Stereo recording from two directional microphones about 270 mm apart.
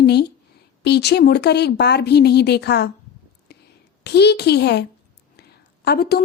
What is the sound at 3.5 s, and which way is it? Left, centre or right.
Whispering, left.